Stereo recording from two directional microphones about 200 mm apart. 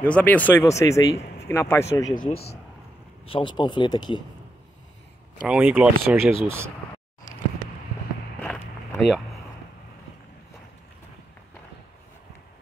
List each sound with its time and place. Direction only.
0.1 s speech: 10° left (ahead or behind)
3.3 s speech: 25° left (ahead or behind)
5.4 s speech: 5° right (ahead or behind)
8.4 s a sound: 5° left (ahead or behind)